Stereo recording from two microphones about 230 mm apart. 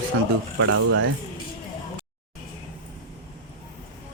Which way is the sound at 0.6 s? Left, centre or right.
Right.